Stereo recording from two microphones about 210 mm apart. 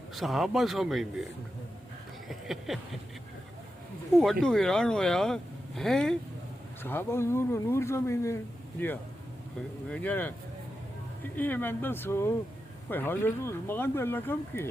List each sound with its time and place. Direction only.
0.1 s speech: centre (ahead or behind)
2.2 s a sound: centre (ahead or behind)
4.2 s speech: centre (ahead or behind)
9.9 s speech: 10° left (ahead or behind)
11.3 s speech: 10° left (ahead or behind)